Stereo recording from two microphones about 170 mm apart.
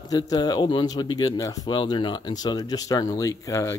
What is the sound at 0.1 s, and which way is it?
Speech, 25° left (ahead or behind).